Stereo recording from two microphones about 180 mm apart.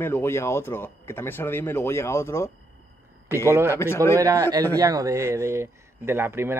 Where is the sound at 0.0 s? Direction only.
15° left (ahead or behind).